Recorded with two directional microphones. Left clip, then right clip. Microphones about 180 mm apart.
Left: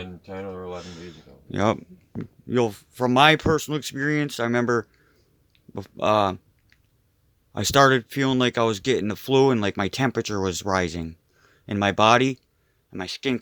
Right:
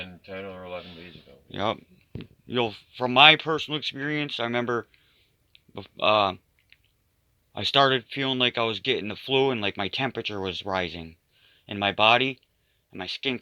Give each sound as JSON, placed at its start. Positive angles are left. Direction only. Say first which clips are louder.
{"t": 0.8, "sound": "speech", "louder": "left 2 dB", "side_deg": 65}
{"t": 2.5, "sound": "speech", "louder": "left 4 dB", "side_deg": 40}
{"t": 7.5, "sound": "speech", "louder": "left 3 dB", "side_deg": 50}